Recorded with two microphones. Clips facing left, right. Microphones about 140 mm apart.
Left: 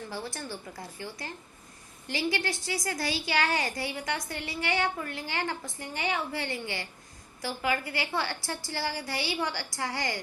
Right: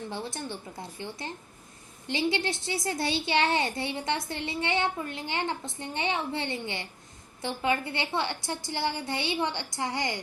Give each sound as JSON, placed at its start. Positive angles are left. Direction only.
{"t": 0.1, "sound": "a child's voice", "side_deg": -20}